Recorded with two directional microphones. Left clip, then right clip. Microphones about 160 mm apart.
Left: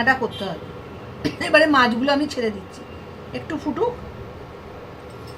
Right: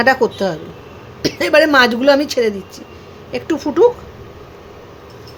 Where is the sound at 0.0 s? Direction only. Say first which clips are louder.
Right 6 dB; 90° right.